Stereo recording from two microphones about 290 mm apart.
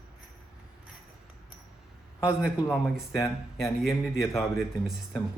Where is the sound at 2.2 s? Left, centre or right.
Centre.